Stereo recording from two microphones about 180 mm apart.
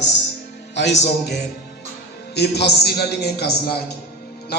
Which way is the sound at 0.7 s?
75° left (ahead or behind).